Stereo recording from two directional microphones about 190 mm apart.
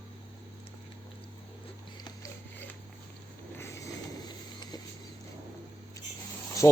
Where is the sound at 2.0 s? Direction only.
15° left (ahead or behind).